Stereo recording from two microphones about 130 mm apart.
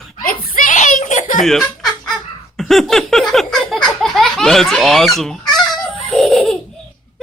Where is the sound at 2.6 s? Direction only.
Centre (ahead or behind).